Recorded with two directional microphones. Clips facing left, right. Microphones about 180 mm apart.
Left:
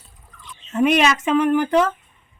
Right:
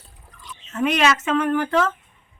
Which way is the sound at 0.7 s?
15° left (ahead or behind).